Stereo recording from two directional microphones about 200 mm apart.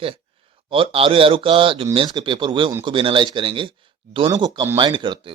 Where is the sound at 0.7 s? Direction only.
25° right (ahead or behind).